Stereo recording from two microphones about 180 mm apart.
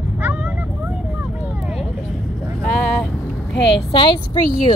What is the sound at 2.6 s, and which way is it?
Vehicle, 5° left (ahead or behind).